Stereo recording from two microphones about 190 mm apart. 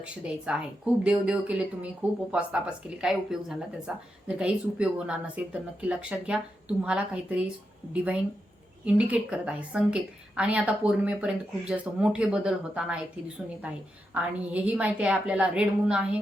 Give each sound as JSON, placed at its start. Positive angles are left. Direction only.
{"t": 0.0, "sound": "speech", "side_deg": -5}
{"t": 8.8, "sound": "a woman's voice", "side_deg": -5}